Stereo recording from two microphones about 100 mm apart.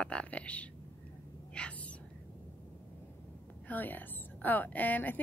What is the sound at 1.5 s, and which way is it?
Whispering, 10° left (ahead or behind).